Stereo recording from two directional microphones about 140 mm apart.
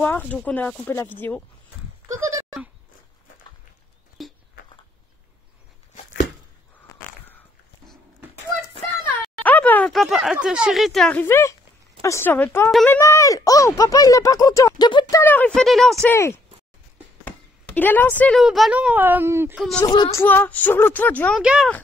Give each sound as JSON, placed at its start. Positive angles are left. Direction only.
{"t": 0.0, "sound": "speech", "side_deg": 10}
{"t": 2.1, "sound": "bleat", "side_deg": -20}
{"t": 4.2, "sound": "a sound", "side_deg": 0}
{"t": 9.0, "sound": "a sound", "side_deg": 10}
{"t": 9.9, "sound": "speech", "side_deg": 0}
{"t": 15.2, "sound": "speech", "side_deg": 10}
{"t": 16.1, "sound": "speech", "side_deg": 20}
{"t": 17.7, "sound": "speech", "side_deg": 15}
{"t": 18.3, "sound": "speech", "side_deg": 0}
{"t": 18.8, "sound": "speech", "side_deg": -10}
{"t": 19.5, "sound": "speech", "side_deg": 0}
{"t": 20.1, "sound": "speech", "side_deg": 15}
{"t": 21.4, "sound": "speech", "side_deg": -5}